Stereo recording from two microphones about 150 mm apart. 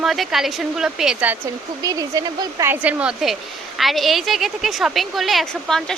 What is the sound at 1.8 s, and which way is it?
A woman's voice, 25° right (ahead or behind).